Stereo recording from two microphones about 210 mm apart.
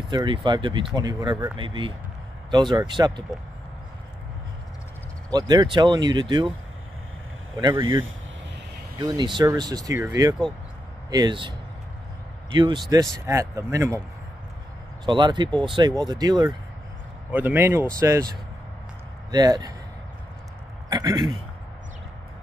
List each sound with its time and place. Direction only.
0.1 s speech: 20° right (ahead or behind)
5.3 s speech: 20° right (ahead or behind)
7.5 s speech: 20° right (ahead or behind)
9.0 s speech: 20° right (ahead or behind)
12.5 s speech: 20° right (ahead or behind)
15.0 s speech: 20° right (ahead or behind)
19.3 s speech: 20° right (ahead or behind)
20.9 s a man's voice: 20° right (ahead or behind)